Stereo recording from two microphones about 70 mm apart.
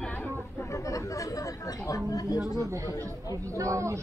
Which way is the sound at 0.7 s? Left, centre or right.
Left.